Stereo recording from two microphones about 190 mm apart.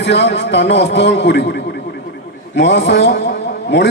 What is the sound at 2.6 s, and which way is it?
Speech, 65° left (ahead or behind).